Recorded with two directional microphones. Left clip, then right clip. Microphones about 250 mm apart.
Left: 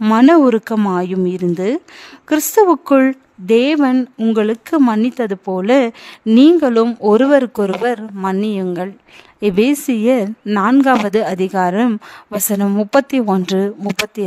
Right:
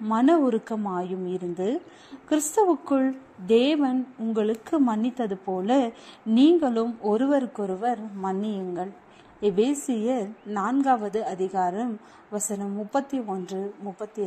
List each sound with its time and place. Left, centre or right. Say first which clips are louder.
0.0 s speech: left 11 dB; left